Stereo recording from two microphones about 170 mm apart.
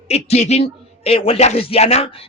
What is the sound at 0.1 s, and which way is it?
Speech, 40° left (ahead or behind).